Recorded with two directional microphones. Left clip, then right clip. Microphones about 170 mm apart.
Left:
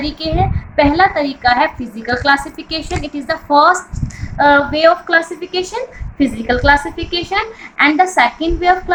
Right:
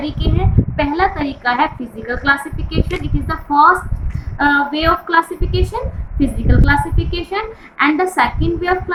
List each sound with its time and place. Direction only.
0.0 s a woman's voice: 55° left (ahead or behind)